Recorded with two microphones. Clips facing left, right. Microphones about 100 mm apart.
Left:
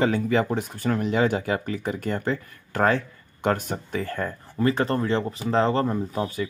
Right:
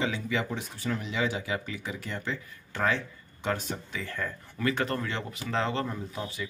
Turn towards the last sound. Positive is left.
turn(degrees=45)  # may be behind; listen again after turning